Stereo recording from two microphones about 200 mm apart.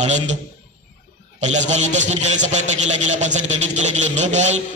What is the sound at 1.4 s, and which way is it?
A man's voice, 35° right (ahead or behind).